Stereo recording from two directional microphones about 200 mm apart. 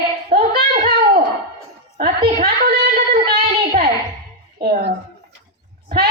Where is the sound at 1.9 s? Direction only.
45° right (ahead or behind).